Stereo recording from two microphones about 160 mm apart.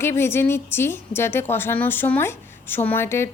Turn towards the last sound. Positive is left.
turn(degrees=15)  # may be behind; listen again after turning